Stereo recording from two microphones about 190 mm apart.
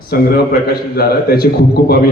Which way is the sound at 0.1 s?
55° left (ahead or behind).